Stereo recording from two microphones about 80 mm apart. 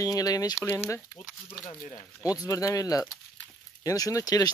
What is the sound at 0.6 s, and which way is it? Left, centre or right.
Speech, left.